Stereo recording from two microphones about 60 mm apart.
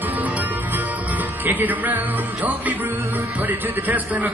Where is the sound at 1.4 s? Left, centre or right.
Right.